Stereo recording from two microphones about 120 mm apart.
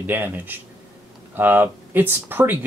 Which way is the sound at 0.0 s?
15° right (ahead or behind).